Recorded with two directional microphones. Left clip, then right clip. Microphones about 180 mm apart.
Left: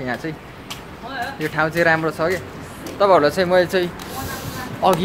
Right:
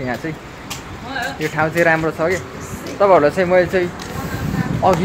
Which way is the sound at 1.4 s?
Centre (ahead or behind).